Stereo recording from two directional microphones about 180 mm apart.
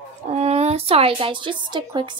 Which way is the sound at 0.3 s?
35° right (ahead or behind).